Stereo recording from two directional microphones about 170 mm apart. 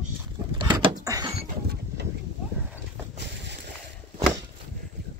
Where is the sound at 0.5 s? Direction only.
30° right (ahead or behind).